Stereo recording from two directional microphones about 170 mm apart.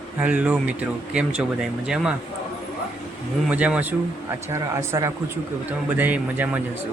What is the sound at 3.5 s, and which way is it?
Speech, 10° right (ahead or behind).